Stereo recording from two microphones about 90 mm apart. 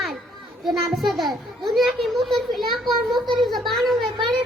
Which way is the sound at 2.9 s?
55° right (ahead or behind).